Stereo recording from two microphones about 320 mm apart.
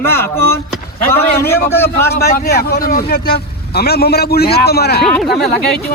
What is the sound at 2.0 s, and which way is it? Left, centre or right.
A man's voice, left.